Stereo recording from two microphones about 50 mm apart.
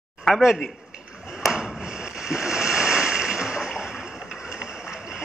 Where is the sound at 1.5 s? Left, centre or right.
Centre.